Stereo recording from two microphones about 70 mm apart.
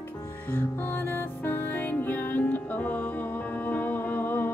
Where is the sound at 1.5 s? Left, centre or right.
Left.